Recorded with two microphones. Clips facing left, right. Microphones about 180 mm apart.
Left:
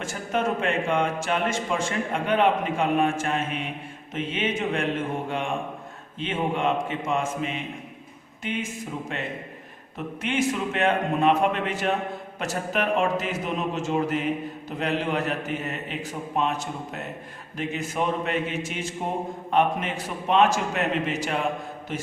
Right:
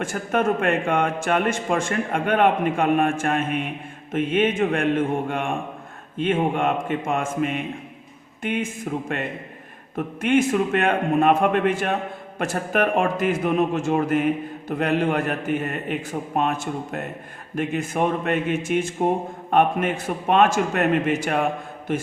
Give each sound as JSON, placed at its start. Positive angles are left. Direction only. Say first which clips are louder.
{"t": 0.0, "sound": "a man's voice", "louder": "right 4 dB", "side_deg": -55}
{"t": 6.1, "sound": "a man's voice", "louder": "right 5 dB", "side_deg": -50}
{"t": 9.1, "sound": "a man's voice", "louder": "right 4 dB", "side_deg": -55}